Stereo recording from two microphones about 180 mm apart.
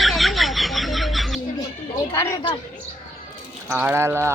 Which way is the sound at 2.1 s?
15° left (ahead or behind).